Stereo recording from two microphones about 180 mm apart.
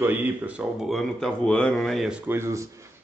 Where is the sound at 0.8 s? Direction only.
Centre (ahead or behind).